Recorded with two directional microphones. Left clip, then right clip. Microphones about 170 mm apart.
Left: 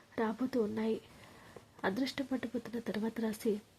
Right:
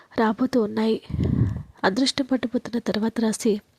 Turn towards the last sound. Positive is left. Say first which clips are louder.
# right 12 dB
turn(degrees=-45)  # may be behind; listen again after turning